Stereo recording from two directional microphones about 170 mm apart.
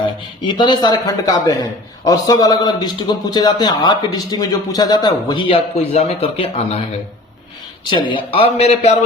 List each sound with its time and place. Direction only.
0.0 s a man's voice: 30° left (ahead or behind)
7.9 s a man's voice: 30° left (ahead or behind)